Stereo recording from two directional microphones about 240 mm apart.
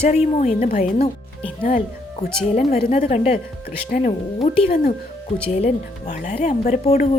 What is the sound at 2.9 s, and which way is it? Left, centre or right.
Speech, left.